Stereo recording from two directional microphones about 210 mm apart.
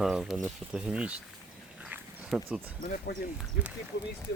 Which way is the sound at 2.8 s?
45° left (ahead or behind).